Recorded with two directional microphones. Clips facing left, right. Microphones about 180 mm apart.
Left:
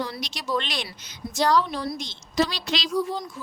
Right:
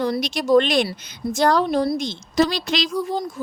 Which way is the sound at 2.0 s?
50° right (ahead or behind).